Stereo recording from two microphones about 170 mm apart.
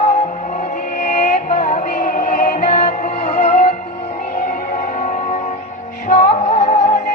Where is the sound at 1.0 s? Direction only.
45° left (ahead or behind).